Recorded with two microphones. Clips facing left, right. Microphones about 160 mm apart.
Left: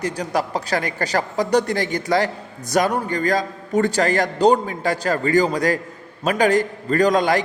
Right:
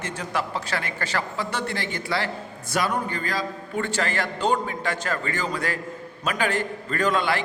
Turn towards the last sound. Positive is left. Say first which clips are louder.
# left 7 dB
turn(degrees=40)  # may be behind; listen again after turning